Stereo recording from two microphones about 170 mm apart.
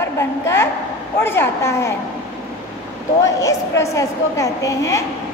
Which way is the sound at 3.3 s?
15° left (ahead or behind).